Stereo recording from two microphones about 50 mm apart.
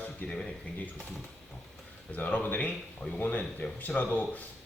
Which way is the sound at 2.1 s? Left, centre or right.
Left.